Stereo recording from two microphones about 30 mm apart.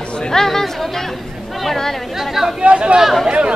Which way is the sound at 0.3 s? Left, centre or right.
Centre.